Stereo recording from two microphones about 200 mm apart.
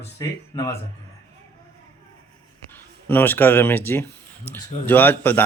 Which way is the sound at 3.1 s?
10° left (ahead or behind).